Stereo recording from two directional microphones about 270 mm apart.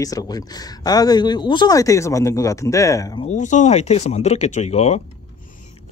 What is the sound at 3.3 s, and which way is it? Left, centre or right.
Speech, left.